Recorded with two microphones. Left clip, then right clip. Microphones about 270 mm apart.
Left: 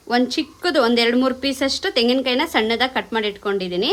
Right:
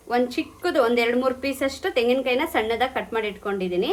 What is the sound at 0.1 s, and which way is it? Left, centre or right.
A woman's voice, left.